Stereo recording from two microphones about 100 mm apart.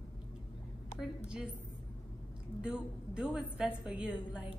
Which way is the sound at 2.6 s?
10° right (ahead or behind).